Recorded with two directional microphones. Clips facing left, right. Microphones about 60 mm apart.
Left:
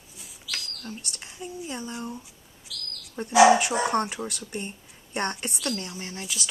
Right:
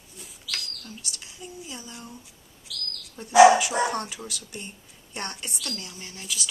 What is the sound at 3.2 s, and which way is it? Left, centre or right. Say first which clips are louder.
Speech: right 2 dB; left.